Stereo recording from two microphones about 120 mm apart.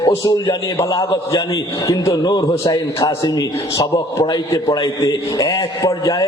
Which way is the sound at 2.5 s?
40° left (ahead or behind).